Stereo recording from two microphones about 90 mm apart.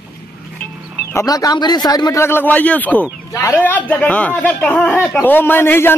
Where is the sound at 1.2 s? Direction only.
50° left (ahead or behind).